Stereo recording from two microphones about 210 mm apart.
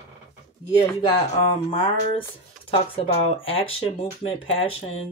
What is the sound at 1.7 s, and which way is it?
Speech, 25° left (ahead or behind).